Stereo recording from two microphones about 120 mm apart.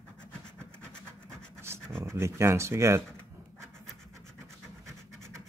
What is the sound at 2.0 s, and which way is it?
Speech, 20° right (ahead or behind).